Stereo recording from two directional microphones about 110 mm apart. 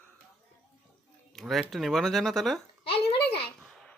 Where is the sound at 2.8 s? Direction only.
60° left (ahead or behind).